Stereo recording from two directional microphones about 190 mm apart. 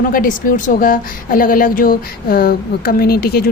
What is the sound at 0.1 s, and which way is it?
A woman's voice, 45° left (ahead or behind).